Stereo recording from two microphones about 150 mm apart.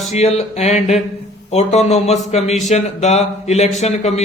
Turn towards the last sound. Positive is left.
turn(degrees=50)  # may be behind; listen again after turning